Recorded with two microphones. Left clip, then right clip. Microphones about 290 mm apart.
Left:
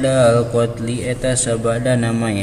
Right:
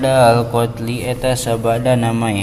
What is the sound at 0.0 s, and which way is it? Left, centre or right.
A man's voice, centre.